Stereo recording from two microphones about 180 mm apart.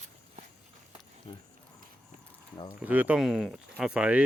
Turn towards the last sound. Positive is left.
turn(degrees=-10)  # may be behind; listen again after turning